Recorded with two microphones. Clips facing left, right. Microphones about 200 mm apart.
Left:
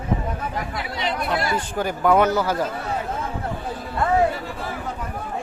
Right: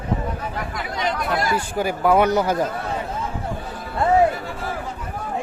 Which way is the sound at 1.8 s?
5° right (ahead or behind).